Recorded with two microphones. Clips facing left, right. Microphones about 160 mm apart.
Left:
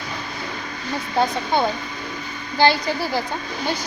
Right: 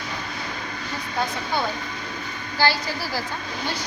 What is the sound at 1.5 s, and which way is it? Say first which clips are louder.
A woman's voice: left 4 dB; 20° left (ahead or behind).